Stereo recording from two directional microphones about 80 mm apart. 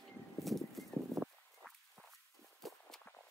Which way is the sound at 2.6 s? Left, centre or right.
Centre.